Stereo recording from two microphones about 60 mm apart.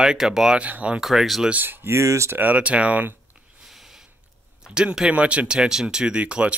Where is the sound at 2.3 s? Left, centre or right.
Right.